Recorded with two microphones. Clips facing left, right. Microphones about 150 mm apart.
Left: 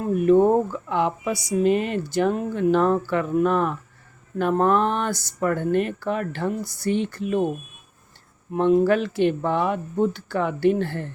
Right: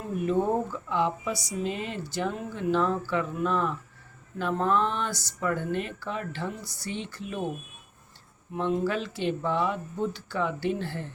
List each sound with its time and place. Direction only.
0.0 s speech: 60° left (ahead or behind)
8.5 s speech: 55° left (ahead or behind)